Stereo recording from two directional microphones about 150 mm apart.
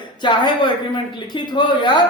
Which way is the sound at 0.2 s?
30° left (ahead or behind).